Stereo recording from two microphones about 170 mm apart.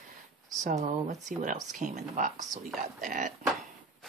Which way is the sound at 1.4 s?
50° right (ahead or behind).